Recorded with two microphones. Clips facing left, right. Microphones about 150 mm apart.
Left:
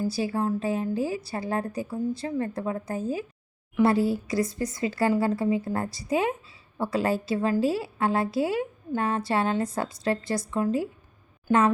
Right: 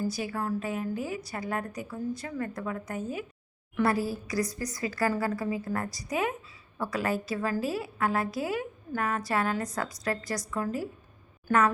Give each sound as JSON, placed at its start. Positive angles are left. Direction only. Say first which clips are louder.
{"t": 0.1, "sound": "a woman's voice", "louder": "left 5 dB", "side_deg": 30}